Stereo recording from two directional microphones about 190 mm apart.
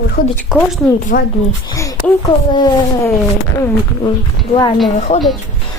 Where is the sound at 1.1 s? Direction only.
45° left (ahead or behind).